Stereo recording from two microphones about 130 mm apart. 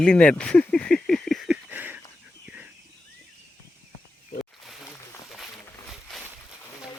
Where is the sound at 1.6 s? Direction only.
15° right (ahead or behind).